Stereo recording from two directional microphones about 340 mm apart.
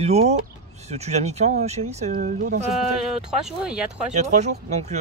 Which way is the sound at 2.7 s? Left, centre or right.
Centre.